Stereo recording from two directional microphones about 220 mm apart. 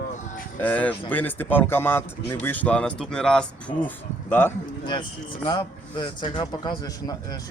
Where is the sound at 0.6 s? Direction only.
5° left (ahead or behind).